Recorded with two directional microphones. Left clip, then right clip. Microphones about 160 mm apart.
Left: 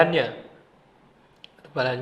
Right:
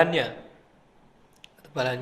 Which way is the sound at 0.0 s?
Centre (ahead or behind).